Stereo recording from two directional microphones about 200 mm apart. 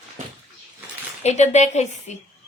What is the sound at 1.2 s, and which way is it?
Speech, 35° left (ahead or behind).